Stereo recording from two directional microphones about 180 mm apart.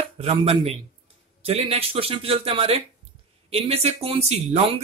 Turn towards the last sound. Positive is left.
turn(degrees=-35)  # may be behind; listen again after turning